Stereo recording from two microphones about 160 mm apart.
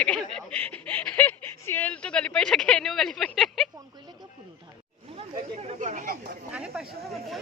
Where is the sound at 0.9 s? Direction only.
10° left (ahead or behind).